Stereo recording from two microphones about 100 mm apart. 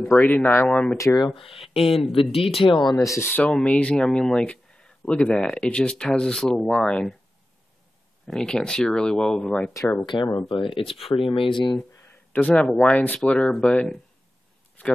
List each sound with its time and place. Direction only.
0.1 s speech: 25° left (ahead or behind)
0.9 s speech: 30° left (ahead or behind)
1.2 s speech: 65° left (ahead or behind)
2.6 s speech: 50° left (ahead or behind)
3.0 s speech: 30° left (ahead or behind)
3.3 s speech: 15° left (ahead or behind)
8.3 s speech: 5° left (ahead or behind)
10.0 s speech: 50° left (ahead or behind)
10.5 s speech: 60° left (ahead or behind)
12.3 s speech: 15° left (ahead or behind)